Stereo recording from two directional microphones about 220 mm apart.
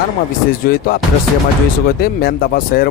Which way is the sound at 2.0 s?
45° left (ahead or behind).